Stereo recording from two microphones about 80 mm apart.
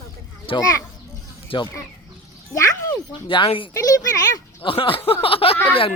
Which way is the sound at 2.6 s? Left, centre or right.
Left.